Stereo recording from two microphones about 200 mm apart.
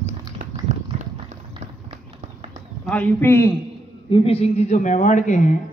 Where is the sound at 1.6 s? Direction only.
35° right (ahead or behind).